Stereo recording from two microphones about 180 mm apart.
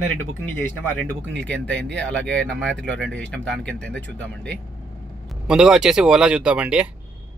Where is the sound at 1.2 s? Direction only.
80° right.